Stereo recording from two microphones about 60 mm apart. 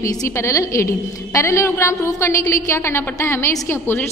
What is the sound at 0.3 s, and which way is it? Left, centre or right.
A woman's voice, left.